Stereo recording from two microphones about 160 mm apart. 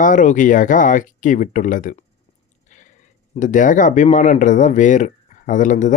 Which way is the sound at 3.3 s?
55° left (ahead or behind).